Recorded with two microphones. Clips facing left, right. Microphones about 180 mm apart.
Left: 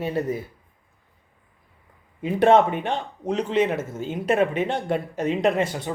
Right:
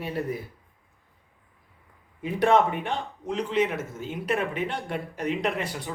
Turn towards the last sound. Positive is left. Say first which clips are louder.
# left 7 dB
turn(degrees=25)  # may be behind; listen again after turning